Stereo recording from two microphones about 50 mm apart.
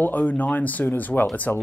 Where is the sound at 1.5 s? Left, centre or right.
Left.